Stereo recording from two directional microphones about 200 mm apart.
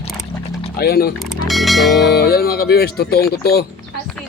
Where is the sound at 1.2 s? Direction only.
Centre (ahead or behind).